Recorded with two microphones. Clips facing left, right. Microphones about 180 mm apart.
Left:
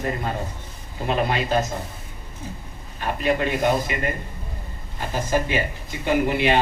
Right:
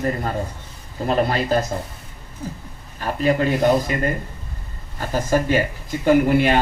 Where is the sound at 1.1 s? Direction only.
40° right (ahead or behind).